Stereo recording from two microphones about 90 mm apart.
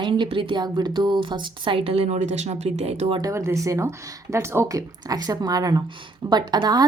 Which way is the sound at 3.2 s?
40° right (ahead or behind).